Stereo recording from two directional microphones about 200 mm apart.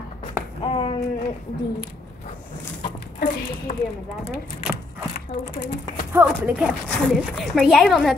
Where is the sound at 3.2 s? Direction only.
50° left (ahead or behind).